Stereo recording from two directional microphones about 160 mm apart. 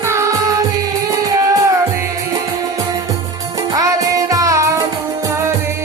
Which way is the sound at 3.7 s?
20° right (ahead or behind).